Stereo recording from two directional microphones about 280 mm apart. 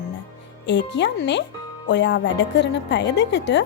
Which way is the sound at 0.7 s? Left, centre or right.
Left.